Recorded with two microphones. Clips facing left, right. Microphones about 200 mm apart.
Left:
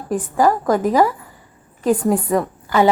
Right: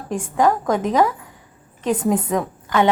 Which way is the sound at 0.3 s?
5° left (ahead or behind).